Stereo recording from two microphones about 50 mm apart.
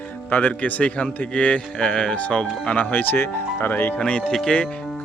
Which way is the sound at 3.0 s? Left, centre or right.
Left.